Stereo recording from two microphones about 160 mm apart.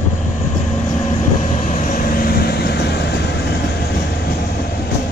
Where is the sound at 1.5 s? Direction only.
55° left (ahead or behind); by 3.6 s 90° left.